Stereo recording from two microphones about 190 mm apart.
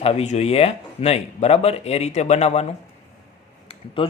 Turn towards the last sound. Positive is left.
turn(degrees=25)  # may be behind; listen again after turning